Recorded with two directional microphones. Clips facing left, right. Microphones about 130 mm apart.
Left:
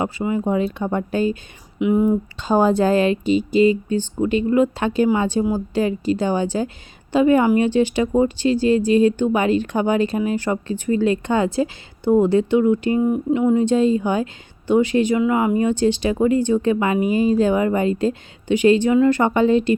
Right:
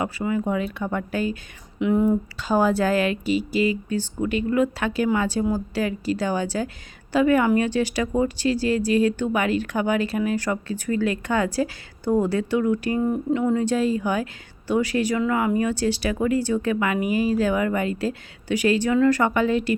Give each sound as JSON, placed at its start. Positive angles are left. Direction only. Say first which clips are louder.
{"t": 0.0, "sound": "speech", "louder": "left 3 dB", "side_deg": 25}
{"t": 1.8, "sound": "speech", "louder": "left 3 dB", "side_deg": 15}